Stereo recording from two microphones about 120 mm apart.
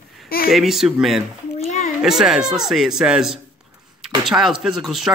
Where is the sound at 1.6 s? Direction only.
75° left (ahead or behind).